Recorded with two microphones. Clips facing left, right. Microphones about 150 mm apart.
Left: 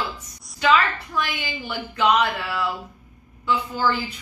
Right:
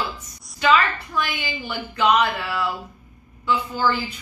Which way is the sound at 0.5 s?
Centre (ahead or behind).